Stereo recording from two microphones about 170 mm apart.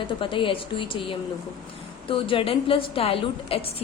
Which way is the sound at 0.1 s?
30° left (ahead or behind).